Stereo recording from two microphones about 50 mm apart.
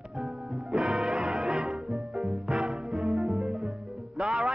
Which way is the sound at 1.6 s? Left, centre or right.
Centre.